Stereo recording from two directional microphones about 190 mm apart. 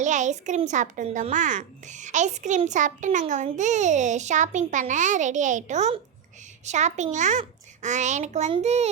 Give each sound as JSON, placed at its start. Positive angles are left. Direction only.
{"t": 0.0, "sound": "a child's voice", "side_deg": -40}